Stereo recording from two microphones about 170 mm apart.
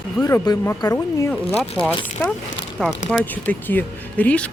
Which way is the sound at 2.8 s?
5° left (ahead or behind).